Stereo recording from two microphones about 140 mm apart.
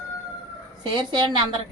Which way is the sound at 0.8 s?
30° right (ahead or behind).